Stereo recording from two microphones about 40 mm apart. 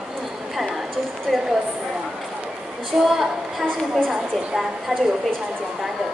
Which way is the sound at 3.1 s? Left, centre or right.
Centre.